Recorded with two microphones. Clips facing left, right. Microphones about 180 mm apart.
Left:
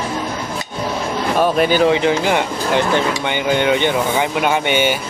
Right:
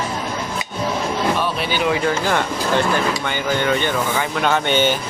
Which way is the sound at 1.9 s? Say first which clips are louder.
Left 4 dB; 20° left (ahead or behind).